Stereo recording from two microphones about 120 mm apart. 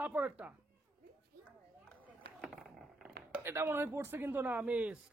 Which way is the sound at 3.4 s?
20° right (ahead or behind).